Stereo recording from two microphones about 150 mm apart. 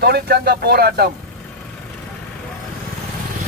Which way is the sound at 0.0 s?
90° right.